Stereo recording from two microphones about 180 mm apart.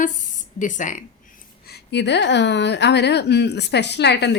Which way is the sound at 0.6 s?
45° left (ahead or behind).